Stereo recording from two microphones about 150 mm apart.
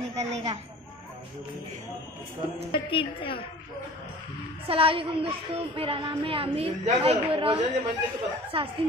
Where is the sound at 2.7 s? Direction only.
35° left (ahead or behind).